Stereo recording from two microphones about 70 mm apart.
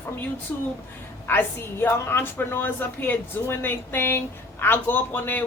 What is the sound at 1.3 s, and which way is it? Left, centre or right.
A man's voice, left.